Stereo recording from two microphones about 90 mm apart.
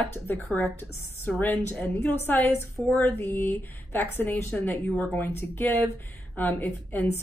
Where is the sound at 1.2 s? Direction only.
20° left (ahead or behind).